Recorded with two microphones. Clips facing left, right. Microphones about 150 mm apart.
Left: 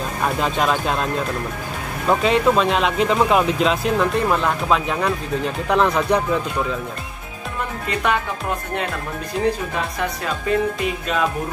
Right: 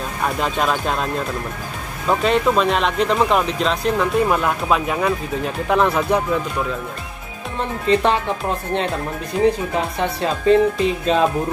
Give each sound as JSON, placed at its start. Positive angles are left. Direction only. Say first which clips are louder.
{"t": 0.4, "sound": "speech", "louder": "even", "side_deg": 0}
{"t": 2.0, "sound": "speech", "louder": "even", "side_deg": 0}
{"t": 7.9, "sound": "speech", "louder": "right 5 dB", "side_deg": -30}
{"t": 9.9, "sound": "speech", "louder": "right 3 dB", "side_deg": -30}